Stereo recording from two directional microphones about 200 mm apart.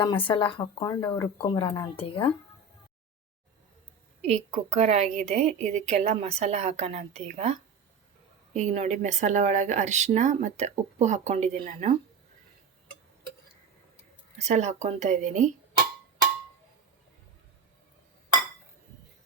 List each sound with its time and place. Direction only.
0.0 s speech: 25° left (ahead or behind)
1.0 s speech: 10° left (ahead or behind)
1.4 s speech: 20° left (ahead or behind)
4.3 s speech: 35° right (ahead or behind)
14.4 s speech: 35° right (ahead or behind)